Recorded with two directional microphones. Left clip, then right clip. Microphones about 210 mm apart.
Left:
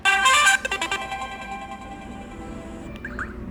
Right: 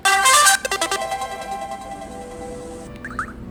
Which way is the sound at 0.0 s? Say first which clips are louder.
Right 3 dB; 30° right (ahead or behind).